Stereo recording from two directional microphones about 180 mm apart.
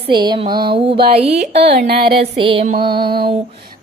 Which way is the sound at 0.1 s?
25° right (ahead or behind).